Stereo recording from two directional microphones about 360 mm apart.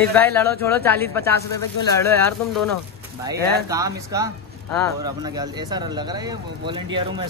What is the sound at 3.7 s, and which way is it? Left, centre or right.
Speech, centre.